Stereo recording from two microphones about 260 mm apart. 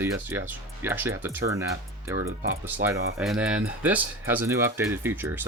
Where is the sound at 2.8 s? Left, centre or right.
Centre.